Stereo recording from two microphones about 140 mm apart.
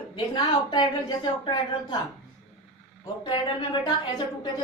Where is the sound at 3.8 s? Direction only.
35° left (ahead or behind).